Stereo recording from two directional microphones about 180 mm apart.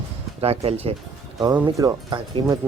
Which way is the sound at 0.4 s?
35° right (ahead or behind).